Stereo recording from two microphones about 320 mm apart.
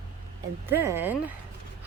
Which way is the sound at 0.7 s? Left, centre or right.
Centre.